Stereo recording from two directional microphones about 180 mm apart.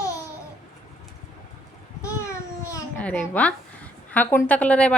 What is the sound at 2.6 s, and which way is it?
Babbling, 10° left (ahead or behind).